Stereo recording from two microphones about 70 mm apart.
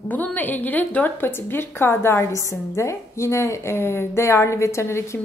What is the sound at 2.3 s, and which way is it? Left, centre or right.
A woman's voice, left.